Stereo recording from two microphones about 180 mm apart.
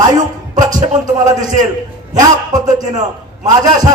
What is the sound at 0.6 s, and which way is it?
Music, 20° right (ahead or behind).